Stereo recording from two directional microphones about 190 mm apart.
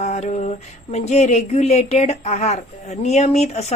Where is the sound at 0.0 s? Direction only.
35° left (ahead or behind).